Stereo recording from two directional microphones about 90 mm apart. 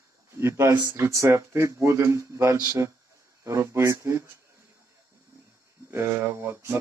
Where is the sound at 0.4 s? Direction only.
30° right (ahead or behind).